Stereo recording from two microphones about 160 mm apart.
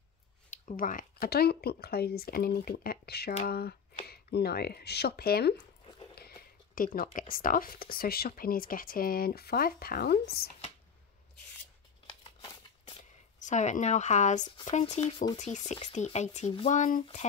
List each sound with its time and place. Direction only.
0.7 s speech: 60° left (ahead or behind); by 10.5 s 75° left (ahead or behind)
13.4 s speech: 50° left (ahead or behind)
15.0 s speech: 25° left (ahead or behind)
15.3 s speech: 50° left (ahead or behind)